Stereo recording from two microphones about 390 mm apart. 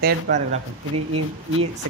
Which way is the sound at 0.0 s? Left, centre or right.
Centre.